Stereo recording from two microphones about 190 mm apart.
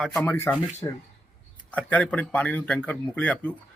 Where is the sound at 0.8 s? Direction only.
25° left (ahead or behind).